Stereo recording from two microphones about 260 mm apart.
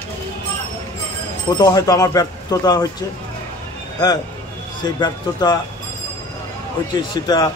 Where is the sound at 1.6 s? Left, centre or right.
Centre.